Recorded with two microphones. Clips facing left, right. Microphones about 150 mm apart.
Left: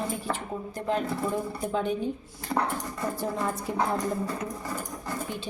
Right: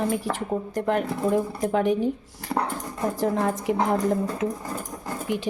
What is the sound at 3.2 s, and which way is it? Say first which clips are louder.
Speech: right 8 dB; 90° right.